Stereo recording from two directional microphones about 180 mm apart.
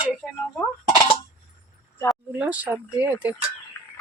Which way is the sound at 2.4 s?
10° right (ahead or behind).